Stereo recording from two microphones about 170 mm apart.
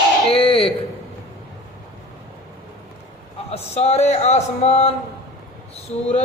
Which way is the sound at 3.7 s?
40° left (ahead or behind).